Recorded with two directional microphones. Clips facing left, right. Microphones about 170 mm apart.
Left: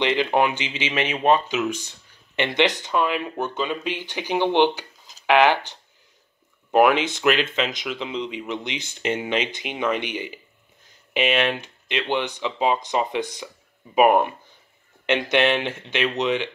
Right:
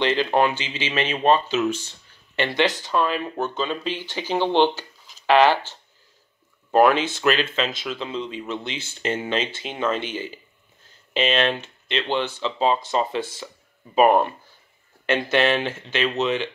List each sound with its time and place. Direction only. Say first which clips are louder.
0.0 s speech: even; 15° left (ahead or behind)